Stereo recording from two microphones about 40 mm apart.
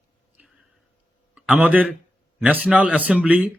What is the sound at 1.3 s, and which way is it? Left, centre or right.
A man's voice, right.